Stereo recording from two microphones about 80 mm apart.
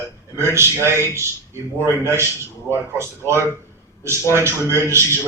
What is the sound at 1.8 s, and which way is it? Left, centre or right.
A man's voice, right.